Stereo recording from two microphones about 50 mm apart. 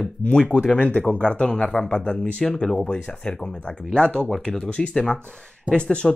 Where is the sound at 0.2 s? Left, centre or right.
Left.